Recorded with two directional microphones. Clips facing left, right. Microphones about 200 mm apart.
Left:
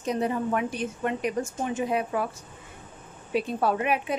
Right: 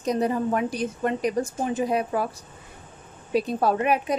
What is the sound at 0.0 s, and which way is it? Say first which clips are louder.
A woman's voice: right 3 dB; 40° right (ahead or behind).